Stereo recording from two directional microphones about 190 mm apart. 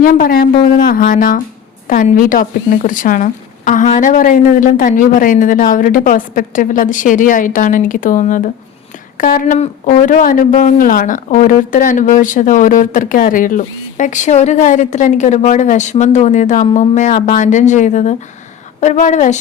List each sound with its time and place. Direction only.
0.0 s a woman's voice: 50° left (ahead or behind)